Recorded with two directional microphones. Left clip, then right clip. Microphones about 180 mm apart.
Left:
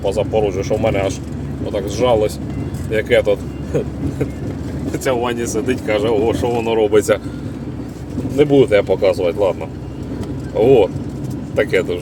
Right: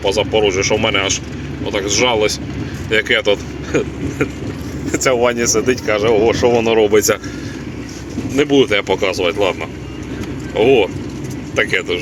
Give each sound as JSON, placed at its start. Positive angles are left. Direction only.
{"t": 0.0, "sound": "speech", "side_deg": 10}
{"t": 4.9, "sound": "speech", "side_deg": -25}
{"t": 5.6, "sound": "speech", "side_deg": -10}
{"t": 6.7, "sound": "speech", "side_deg": 0}
{"t": 8.4, "sound": "speech", "side_deg": -5}